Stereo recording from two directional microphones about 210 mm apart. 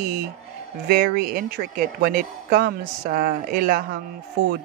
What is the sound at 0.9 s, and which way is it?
Speech, 45° right (ahead or behind).